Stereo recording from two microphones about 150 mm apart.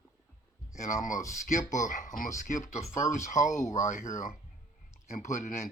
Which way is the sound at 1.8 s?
60° left (ahead or behind).